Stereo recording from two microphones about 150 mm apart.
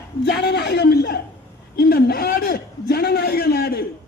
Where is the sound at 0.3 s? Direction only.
90° left.